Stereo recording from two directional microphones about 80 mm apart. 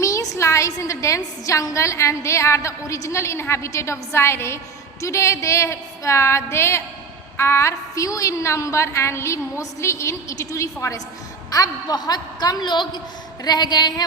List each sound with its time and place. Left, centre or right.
0.0 s a woman's voice: left
11.5 s a woman's voice: left
13.4 s a woman's voice: left